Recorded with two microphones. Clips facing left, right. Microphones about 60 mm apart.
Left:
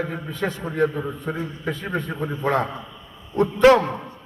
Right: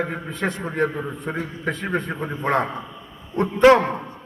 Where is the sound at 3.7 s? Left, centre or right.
Right.